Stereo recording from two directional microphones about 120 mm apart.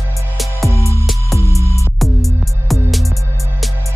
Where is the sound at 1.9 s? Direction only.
Centre (ahead or behind).